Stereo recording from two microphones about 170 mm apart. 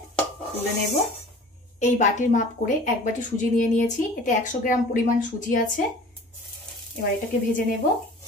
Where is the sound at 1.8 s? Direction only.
45° left (ahead or behind).